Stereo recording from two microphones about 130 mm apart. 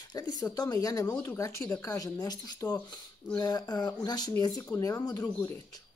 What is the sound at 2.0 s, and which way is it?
Speech, 30° left (ahead or behind).